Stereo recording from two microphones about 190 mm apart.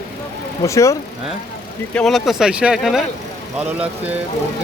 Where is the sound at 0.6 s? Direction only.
15° left (ahead or behind).